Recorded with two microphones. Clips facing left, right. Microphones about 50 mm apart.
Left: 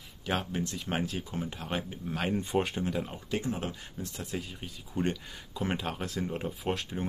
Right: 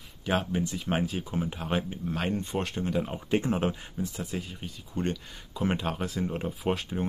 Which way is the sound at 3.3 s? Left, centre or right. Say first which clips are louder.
Right 8 dB; right.